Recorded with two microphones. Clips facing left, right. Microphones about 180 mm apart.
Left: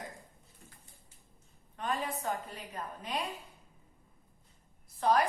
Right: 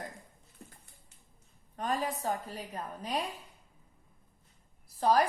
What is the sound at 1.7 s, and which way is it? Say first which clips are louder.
A woman's voice: right 2 dB; 40° right (ahead or behind).